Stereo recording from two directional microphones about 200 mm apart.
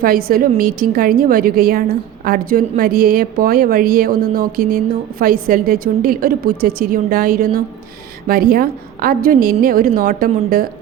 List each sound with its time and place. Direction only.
0.0 s a woman's voice: 45° right (ahead or behind)